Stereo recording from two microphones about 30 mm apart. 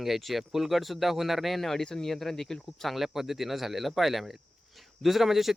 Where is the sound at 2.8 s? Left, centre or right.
Centre.